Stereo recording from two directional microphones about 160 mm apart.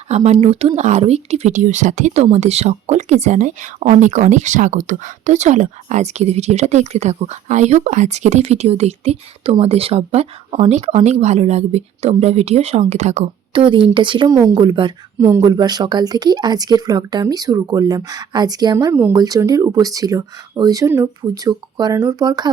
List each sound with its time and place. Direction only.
0.1 s a woman's voice: 45° right (ahead or behind)
13.5 s a woman's voice: 30° right (ahead or behind)